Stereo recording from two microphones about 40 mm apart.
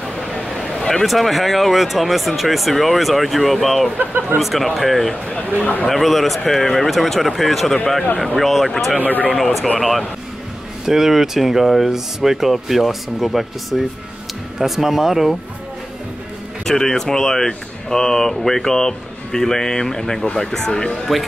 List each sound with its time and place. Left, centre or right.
0.3 s a sound: centre
1.0 s speech: centre
4.0 s speech: right
4.4 s speech: centre
9.0 s speech: left
9.3 s speech: centre
16.6 s speech: centre